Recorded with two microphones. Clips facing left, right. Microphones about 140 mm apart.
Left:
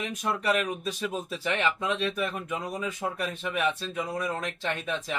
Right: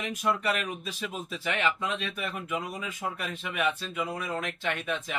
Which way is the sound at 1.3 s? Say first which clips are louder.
Even; 35° left (ahead or behind).